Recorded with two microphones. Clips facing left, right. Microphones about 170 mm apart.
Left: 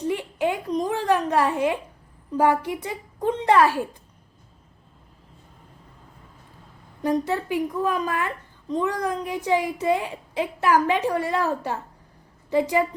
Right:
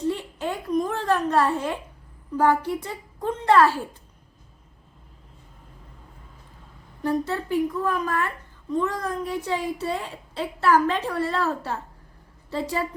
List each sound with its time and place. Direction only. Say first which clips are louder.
0.0 s a sound: left 3 dB; 15° left (ahead or behind)
2.4 s a child's voice: even; 15° left (ahead or behind)
7.0 s a child's voice: left 2 dB; 15° left (ahead or behind)